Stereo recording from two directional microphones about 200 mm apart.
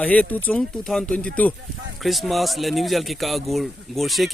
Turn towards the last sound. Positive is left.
turn(degrees=0)  # may be behind; listen again after turning